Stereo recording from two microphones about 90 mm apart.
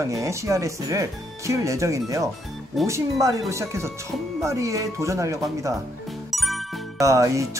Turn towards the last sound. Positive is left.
turn(degrees=-35)  # may be behind; listen again after turning